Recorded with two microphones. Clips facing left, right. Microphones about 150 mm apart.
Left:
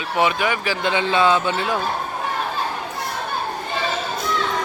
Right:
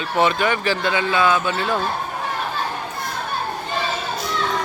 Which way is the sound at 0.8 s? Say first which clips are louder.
Left 3 dB; 25° left (ahead or behind).